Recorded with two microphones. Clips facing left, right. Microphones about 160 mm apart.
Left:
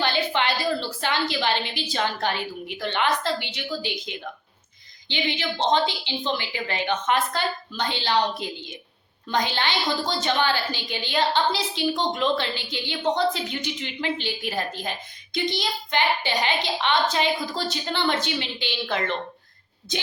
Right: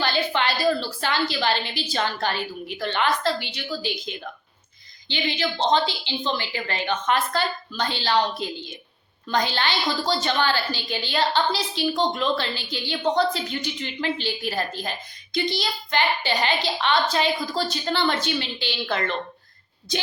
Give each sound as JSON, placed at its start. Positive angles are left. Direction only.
{"t": 0.0, "sound": "a woman's voice", "side_deg": 20}